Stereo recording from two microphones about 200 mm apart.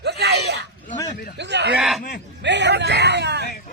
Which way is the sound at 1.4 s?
60° right (ahead or behind).